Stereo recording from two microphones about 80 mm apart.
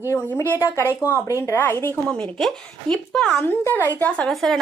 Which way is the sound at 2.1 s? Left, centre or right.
Centre.